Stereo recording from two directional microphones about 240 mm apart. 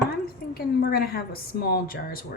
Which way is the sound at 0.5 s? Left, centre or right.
Left.